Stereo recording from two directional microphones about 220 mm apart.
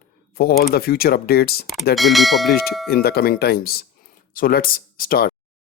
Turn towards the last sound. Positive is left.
turn(degrees=40)  # may be behind; listen again after turning